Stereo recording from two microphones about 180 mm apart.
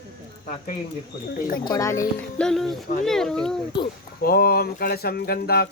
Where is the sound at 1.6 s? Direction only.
20° left (ahead or behind).